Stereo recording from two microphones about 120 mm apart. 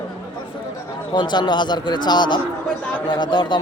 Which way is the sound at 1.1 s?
40° left (ahead or behind).